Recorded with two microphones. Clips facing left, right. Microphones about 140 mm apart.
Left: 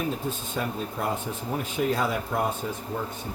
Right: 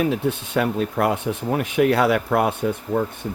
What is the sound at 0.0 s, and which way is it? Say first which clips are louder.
Speech: right 8 dB; 75° right (ahead or behind).